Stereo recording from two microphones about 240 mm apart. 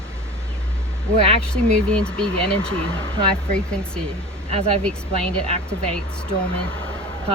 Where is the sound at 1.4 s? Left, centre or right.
Centre.